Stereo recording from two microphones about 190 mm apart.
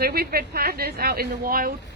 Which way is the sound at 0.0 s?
50° right (ahead or behind).